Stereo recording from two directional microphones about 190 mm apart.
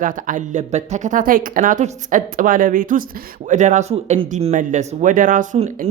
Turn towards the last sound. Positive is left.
turn(degrees=-40)  # may be behind; listen again after turning